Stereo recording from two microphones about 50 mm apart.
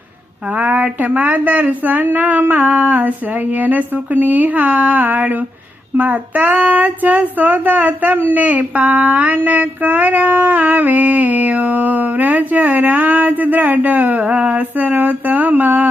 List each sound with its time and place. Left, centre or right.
0.5 s child singing: right